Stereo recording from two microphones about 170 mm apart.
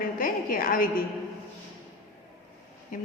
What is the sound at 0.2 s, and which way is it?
Speech, 55° left (ahead or behind).